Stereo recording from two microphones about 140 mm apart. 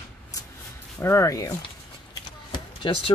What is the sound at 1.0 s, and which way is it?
Speech, 20° left (ahead or behind).